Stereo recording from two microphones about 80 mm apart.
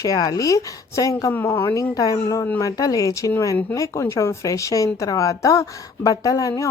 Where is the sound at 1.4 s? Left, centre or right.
Left.